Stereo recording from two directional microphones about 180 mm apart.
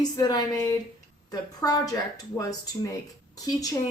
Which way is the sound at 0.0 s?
20° left (ahead or behind).